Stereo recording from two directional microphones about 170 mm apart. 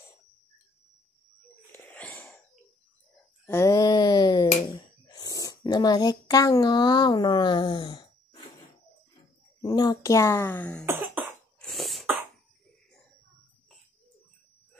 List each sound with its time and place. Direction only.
1.7 s wheeze: 10° left (ahead or behind)
3.4 s a sound: 15° left (ahead or behind)
9.6 s speech: 25° left (ahead or behind)
10.9 s cough: 10° right (ahead or behind)
11.6 s cough: centre (ahead or behind)